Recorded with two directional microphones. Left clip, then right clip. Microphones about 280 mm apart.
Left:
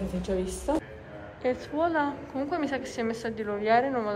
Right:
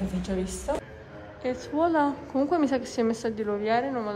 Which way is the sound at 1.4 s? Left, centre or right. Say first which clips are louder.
Right 1 dB; centre.